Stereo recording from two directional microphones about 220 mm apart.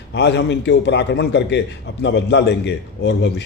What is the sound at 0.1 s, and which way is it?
A man's voice, 50° left (ahead or behind).